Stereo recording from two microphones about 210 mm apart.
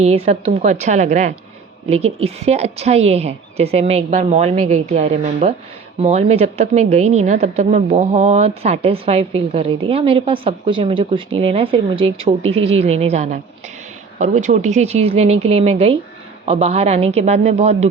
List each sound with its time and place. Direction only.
0.0 s a woman's voice: 30° right (ahead or behind)